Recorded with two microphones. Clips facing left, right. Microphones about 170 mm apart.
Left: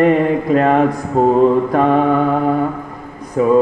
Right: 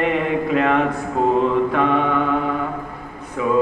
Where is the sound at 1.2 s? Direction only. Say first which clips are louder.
Left 6 dB; 40° left (ahead or behind).